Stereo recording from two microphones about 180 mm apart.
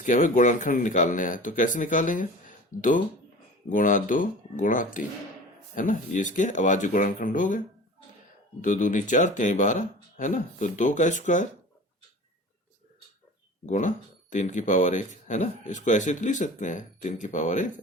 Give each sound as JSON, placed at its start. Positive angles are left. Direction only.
{"t": 0.0, "sound": "speech", "side_deg": 45}
{"t": 8.6, "sound": "speech", "side_deg": 45}
{"t": 13.7, "sound": "speech", "side_deg": 45}